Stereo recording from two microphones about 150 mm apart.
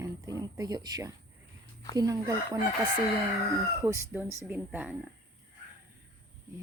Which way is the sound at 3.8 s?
20° right (ahead or behind).